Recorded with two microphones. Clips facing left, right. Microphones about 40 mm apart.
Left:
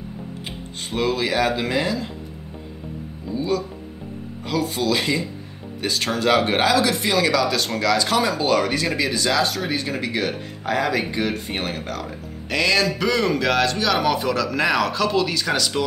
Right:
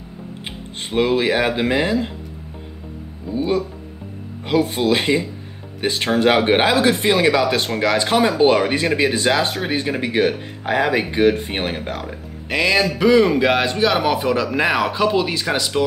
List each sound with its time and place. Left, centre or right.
0.5 s speech: right
3.3 s speech: right; by 15.8 s centre